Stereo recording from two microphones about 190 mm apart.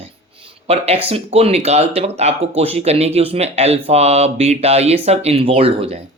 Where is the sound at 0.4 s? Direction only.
30° right (ahead or behind).